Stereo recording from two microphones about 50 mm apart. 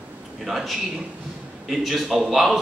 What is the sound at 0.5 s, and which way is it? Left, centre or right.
Speech, centre.